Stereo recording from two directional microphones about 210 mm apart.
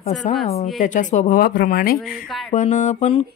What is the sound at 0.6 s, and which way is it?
Speech, 35° left (ahead or behind).